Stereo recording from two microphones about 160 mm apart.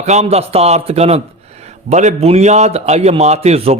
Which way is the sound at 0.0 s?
45° right (ahead or behind).